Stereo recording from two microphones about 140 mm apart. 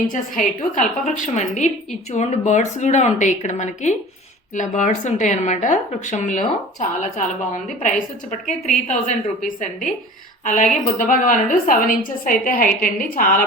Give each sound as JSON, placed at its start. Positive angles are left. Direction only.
{"t": 0.1, "sound": "a woman's voice", "side_deg": 65}